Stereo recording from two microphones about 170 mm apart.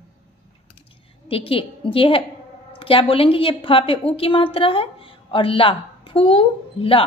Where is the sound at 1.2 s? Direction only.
30° left (ahead or behind).